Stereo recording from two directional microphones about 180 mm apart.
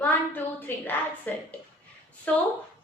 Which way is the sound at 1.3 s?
10° left (ahead or behind).